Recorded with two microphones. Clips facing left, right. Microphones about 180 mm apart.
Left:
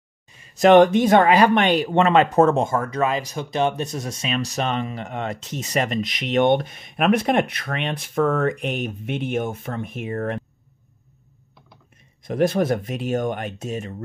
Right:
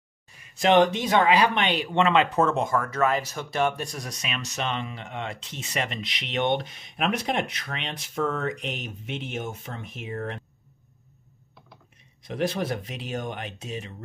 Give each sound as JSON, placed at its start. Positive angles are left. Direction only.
{"t": 0.6, "sound": "speech", "side_deg": 50}
{"t": 12.2, "sound": "speech", "side_deg": 50}